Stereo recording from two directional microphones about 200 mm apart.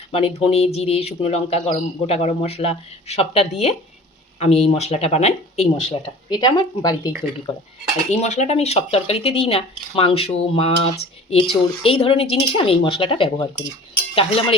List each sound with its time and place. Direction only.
0.1 s speech: 30° left (ahead or behind)
8.1 s speech: 35° left (ahead or behind)